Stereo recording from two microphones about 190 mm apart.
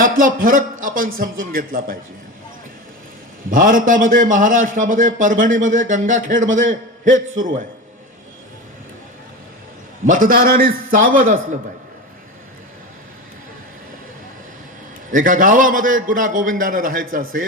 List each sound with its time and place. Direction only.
0.0 s a man's voice: 45° right (ahead or behind)
3.5 s a man's voice: 45° right (ahead or behind)
10.1 s a man's voice: 45° right (ahead or behind)
15.1 s a man's voice: 45° right (ahead or behind)